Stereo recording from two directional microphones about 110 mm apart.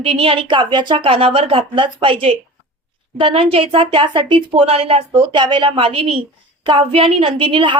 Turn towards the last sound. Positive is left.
turn(degrees=-50)  # may be behind; listen again after turning